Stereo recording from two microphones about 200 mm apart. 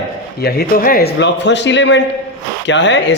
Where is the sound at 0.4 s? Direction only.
45° left (ahead or behind).